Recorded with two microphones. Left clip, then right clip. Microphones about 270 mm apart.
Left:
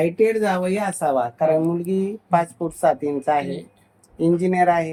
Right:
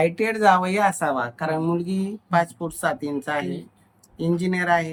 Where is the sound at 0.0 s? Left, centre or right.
Right.